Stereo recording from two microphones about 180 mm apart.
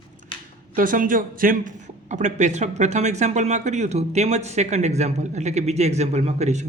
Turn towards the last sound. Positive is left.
turn(degrees=-40)  # may be behind; listen again after turning